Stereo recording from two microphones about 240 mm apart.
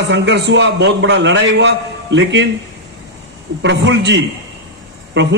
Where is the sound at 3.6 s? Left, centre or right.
Right.